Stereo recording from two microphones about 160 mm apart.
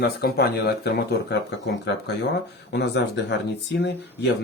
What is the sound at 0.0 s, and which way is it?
Speech, 80° left.